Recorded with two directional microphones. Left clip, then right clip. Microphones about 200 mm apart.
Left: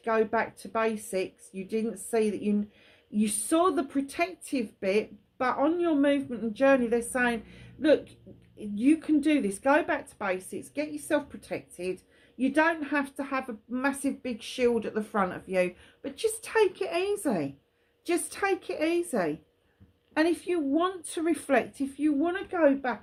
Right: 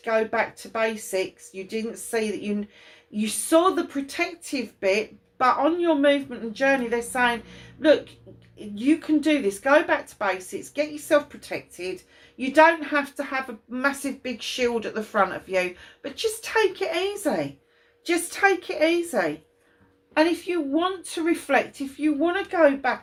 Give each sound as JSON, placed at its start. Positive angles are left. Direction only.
{"t": 0.0, "sound": "a woman's voice", "side_deg": 45}